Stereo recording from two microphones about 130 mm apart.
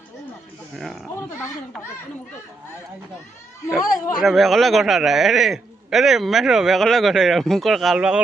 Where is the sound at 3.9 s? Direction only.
25° left (ahead or behind).